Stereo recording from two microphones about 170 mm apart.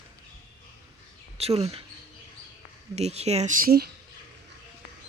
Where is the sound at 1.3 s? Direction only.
35° right (ahead or behind).